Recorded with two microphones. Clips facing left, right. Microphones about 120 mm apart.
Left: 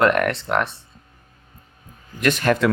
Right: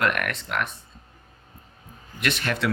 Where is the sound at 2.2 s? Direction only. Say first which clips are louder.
Left 8 dB; 40° left (ahead or behind).